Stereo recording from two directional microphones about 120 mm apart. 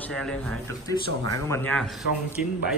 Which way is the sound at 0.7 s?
25° left (ahead or behind).